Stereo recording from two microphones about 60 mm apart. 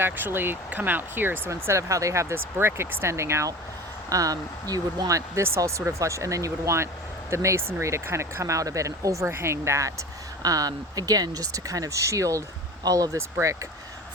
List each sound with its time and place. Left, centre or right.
0.0 s speech: right
1.5 s speech: right
2.3 s speech: right
4.1 s speech: right
9.3 s speech: right
10.4 s speech: right
12.8 s speech: right
13.4 s speech: right